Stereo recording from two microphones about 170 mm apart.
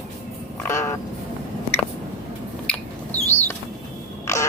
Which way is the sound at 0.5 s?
15° left (ahead or behind).